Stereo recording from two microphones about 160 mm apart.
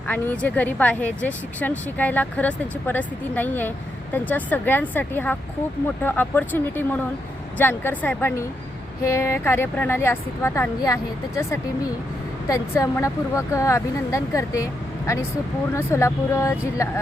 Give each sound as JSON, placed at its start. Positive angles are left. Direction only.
{"t": 0.1, "sound": "speech", "side_deg": 10}